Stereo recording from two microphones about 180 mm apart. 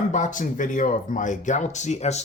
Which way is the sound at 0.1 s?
45° left (ahead or behind).